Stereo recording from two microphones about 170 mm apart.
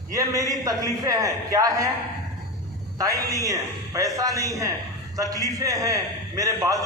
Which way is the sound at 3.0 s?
20° right (ahead or behind).